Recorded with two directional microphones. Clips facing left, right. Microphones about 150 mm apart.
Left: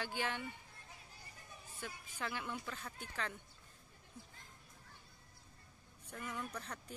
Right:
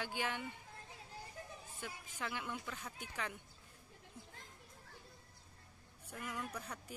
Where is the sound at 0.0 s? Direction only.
15° right (ahead or behind).